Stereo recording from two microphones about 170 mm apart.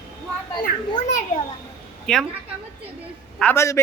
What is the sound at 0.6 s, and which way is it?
Speech, 50° left (ahead or behind).